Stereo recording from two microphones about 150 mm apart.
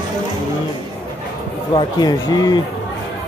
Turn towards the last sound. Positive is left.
turn(degrees=25)  # may be behind; listen again after turning